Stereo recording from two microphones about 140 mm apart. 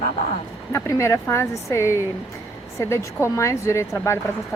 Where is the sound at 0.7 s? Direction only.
20° left (ahead or behind).